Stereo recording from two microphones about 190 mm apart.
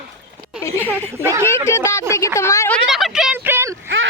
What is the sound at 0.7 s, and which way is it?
Speech, 10° right (ahead or behind).